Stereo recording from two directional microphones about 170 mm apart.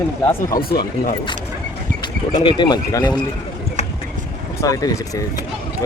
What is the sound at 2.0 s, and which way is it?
Speech, 30° left (ahead or behind).